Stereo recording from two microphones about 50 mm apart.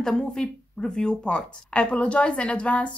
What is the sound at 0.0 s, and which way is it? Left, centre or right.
A woman's voice, centre.